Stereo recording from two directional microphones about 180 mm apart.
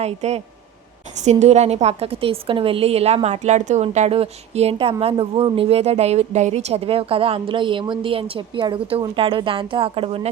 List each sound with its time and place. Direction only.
0.0 s a woman's voice: 35° right (ahead or behind)